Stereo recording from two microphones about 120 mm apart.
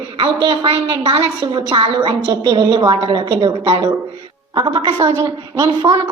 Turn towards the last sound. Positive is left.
turn(degrees=-30)  # may be behind; listen again after turning